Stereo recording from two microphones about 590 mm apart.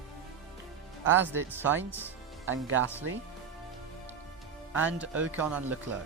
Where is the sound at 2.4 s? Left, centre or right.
Centre.